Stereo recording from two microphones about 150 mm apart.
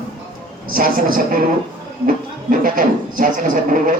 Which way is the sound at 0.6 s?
70° right (ahead or behind).